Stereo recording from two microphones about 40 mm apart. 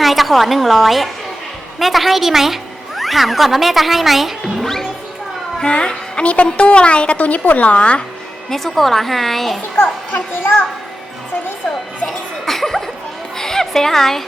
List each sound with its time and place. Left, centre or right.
0.0 s a woman's voice: centre
5.5 s a woman's voice: left
8.4 s speech: centre
9.7 s a child's voice: left
12.0 s a sound: centre